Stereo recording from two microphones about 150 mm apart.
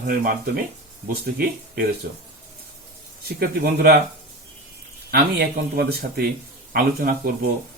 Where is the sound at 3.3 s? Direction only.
85° right.